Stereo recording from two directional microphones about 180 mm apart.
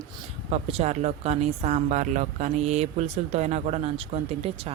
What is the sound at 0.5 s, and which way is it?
Speech, 35° right (ahead or behind).